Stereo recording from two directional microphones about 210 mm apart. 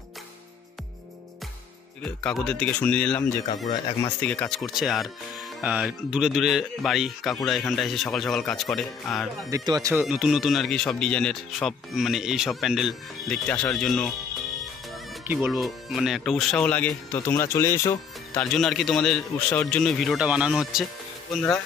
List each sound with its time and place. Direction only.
2.0 s speech: 5° left (ahead or behind)
9.5 s speech: 15° right (ahead or behind)
10.0 s speech: 5° right (ahead or behind)
15.2 s speech: centre (ahead or behind)
18.4 s speech: centre (ahead or behind)